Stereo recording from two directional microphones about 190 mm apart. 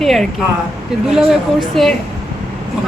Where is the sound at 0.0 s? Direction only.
Centre (ahead or behind).